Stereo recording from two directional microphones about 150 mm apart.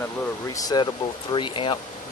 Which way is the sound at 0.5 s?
25° left (ahead or behind).